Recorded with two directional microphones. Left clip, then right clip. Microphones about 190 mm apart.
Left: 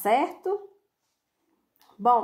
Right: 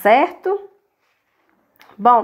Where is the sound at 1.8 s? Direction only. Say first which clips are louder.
Right 8 dB; 25° right (ahead or behind).